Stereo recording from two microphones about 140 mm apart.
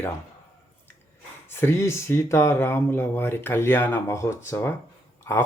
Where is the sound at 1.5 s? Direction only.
15° left (ahead or behind).